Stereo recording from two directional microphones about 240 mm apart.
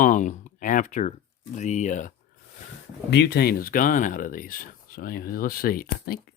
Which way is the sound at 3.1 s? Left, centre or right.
Left.